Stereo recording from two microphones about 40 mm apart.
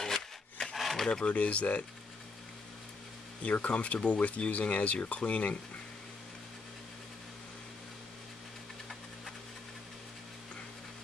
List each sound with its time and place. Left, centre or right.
0.0 s wood: centre
0.7 s a sound: centre
1.2 s speech: left
3.4 s speech: left